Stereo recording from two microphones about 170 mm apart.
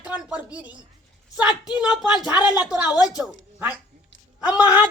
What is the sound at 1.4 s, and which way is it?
A woman's voice, 5° right (ahead or behind).